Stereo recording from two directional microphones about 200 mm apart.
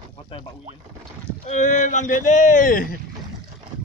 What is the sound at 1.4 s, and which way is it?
Speech, 35° left (ahead or behind).